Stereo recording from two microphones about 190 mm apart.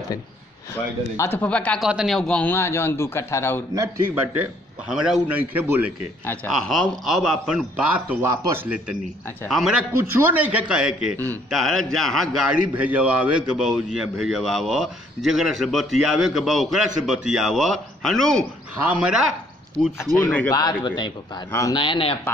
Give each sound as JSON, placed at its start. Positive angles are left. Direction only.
{"t": 1.1, "sound": "a man's voice", "side_deg": 15}
{"t": 3.7, "sound": "speech", "side_deg": -15}
{"t": 4.8, "sound": "a man's voice", "side_deg": -5}
{"t": 6.2, "sound": "a man's voice", "side_deg": 5}
{"t": 9.5, "sound": "a man's voice", "side_deg": 0}
{"t": 9.9, "sound": "a man's voice", "side_deg": -10}
{"t": 20.2, "sound": "a man's voice", "side_deg": 10}
{"t": 20.5, "sound": "speech", "side_deg": 20}